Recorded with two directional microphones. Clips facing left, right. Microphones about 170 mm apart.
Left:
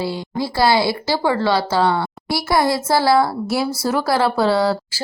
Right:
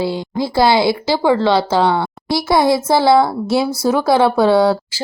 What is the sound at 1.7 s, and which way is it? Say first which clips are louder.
Speech: right 3 dB; centre (ahead or behind).